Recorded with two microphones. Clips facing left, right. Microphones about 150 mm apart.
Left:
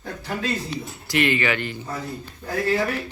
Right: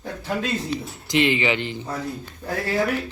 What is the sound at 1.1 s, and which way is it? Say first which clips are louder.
Speech: right 1 dB; 20° right (ahead or behind).